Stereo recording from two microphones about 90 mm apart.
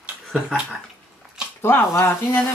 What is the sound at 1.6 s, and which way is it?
Speech, 25° left (ahead or behind).